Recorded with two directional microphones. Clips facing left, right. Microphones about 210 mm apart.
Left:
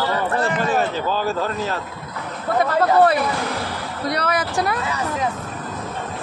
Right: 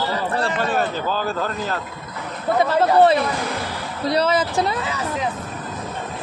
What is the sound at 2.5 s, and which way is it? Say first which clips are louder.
Speech: even; 25° right (ahead or behind).